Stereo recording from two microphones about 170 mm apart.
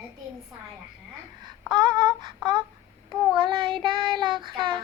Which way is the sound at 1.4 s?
25° right (ahead or behind).